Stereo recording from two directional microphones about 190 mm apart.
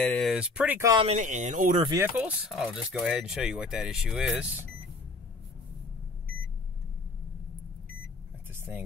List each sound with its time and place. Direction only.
0.0 s speech: 5° left (ahead or behind)
0.9 s speech: 35° right (ahead or behind)
2.0 s speech: 5° right (ahead or behind)
8.5 s a sound: 15° right (ahead or behind)